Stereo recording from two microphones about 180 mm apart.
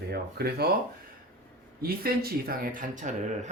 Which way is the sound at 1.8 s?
55° right (ahead or behind).